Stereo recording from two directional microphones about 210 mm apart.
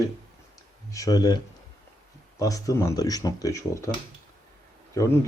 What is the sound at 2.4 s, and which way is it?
Speech, 15° left (ahead or behind).